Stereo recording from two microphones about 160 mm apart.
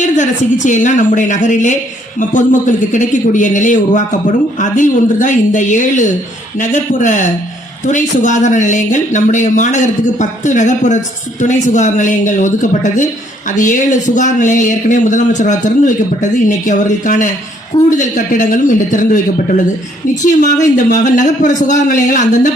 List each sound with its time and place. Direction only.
0.0 s speech: 50° left (ahead or behind)
20.4 s speech: 50° left (ahead or behind)